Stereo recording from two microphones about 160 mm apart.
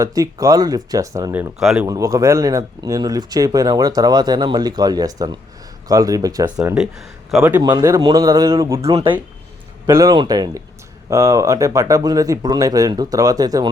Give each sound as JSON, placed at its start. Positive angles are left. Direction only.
{"t": 0.0, "sound": "speech", "side_deg": -20}
{"t": 1.5, "sound": "a man's voice", "side_deg": -5}
{"t": 1.9, "sound": "speech", "side_deg": -20}
{"t": 6.7, "sound": "speech", "side_deg": 0}
{"t": 7.6, "sound": "speech", "side_deg": -20}
{"t": 9.9, "sound": "speech", "side_deg": -20}